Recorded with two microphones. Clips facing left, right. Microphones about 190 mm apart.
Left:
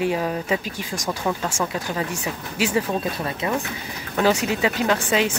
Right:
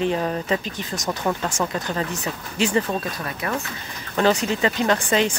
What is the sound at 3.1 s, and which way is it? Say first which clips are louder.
Speech: left 3 dB; 25° left (ahead or behind).